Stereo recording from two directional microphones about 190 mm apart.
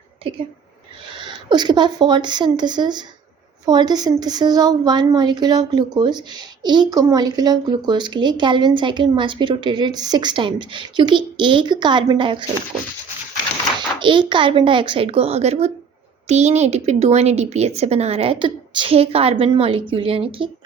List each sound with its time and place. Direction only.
1.2 s speech: 25° right (ahead or behind)
13.7 s a woman's voice: 25° right (ahead or behind)